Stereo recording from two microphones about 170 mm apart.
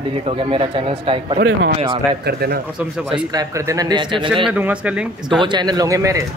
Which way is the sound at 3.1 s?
20° right (ahead or behind).